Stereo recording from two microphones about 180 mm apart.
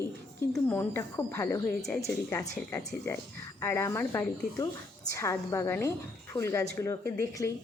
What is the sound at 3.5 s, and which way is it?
Speech, 15° left (ahead or behind).